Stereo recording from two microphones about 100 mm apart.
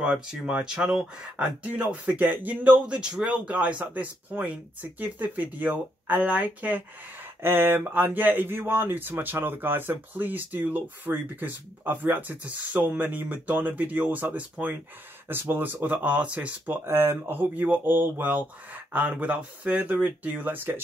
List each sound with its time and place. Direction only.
0.0 s speech: 10° right (ahead or behind)